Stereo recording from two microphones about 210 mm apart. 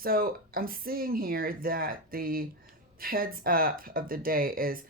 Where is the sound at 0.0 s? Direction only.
45° right (ahead or behind).